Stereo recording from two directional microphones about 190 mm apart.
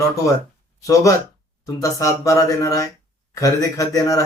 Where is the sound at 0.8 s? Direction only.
15° left (ahead or behind).